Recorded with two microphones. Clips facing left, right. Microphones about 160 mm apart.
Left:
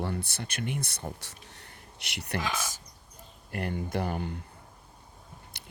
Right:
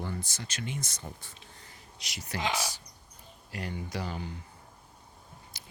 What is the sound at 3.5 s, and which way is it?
Speech, 55° left (ahead or behind).